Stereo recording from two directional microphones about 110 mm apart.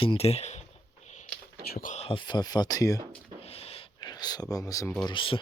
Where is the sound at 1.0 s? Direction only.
90° left.